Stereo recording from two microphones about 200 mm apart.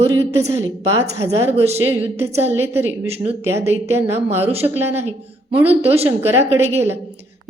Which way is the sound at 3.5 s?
30° right (ahead or behind).